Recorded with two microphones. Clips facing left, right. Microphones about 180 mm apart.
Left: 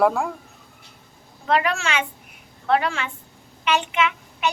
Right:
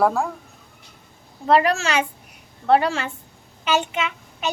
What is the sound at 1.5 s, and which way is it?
A woman's voice, 35° right (ahead or behind).